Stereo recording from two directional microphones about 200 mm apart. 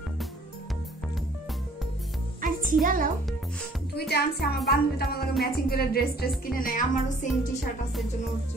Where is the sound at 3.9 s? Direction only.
55° left (ahead or behind).